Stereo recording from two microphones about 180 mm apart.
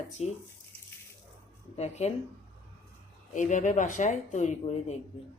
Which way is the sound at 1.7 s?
35° left (ahead or behind).